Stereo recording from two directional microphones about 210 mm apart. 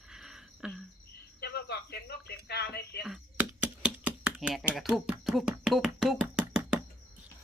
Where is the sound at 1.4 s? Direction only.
50° left (ahead or behind).